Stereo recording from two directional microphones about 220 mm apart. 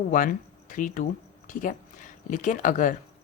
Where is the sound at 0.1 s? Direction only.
35° left (ahead or behind).